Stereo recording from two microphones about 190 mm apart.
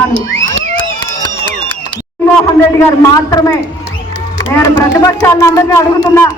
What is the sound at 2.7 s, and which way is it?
Speech, 20° left (ahead or behind).